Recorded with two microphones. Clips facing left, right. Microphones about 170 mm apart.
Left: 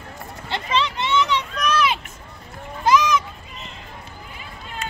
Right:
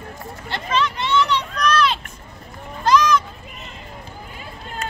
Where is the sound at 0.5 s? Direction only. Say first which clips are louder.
Right 1 dB; 20° left (ahead or behind).